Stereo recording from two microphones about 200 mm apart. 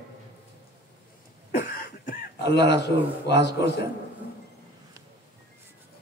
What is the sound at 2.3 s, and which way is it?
A man's voice, 60° left (ahead or behind).